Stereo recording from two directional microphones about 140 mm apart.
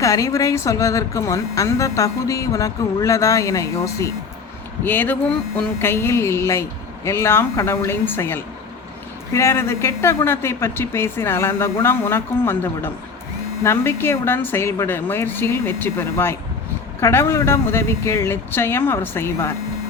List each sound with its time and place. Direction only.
0.0 s a woman's voice: 25° left (ahead or behind)